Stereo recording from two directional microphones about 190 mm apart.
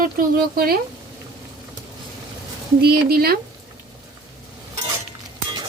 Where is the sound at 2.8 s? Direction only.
55° right (ahead or behind).